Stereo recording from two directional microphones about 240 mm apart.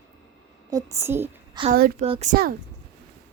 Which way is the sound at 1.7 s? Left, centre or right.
Right.